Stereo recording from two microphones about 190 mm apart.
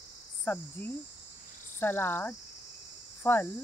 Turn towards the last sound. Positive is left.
turn(degrees=10)  # may be behind; listen again after turning